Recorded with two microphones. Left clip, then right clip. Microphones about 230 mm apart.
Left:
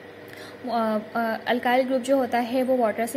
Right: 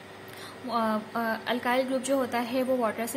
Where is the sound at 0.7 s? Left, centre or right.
Centre.